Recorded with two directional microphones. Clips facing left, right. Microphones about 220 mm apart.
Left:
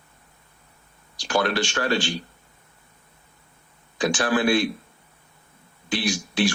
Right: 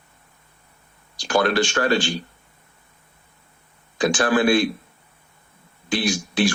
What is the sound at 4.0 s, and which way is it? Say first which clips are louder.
Speech: right 3 dB; 50° right (ahead or behind).